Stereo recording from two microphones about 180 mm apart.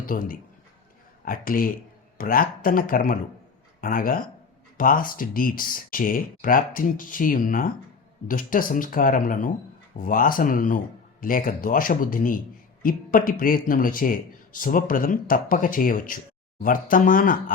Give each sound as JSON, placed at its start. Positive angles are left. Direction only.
{"t": 0.0, "sound": "a man's voice", "side_deg": 50}